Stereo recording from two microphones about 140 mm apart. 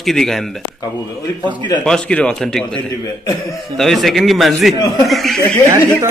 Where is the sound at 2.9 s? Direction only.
30° left (ahead or behind).